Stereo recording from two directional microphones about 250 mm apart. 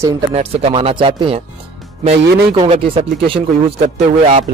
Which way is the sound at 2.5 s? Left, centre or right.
Right.